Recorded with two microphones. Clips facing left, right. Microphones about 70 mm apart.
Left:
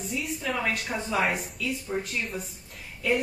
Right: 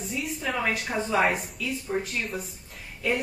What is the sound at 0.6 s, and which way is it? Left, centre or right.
Speech, centre.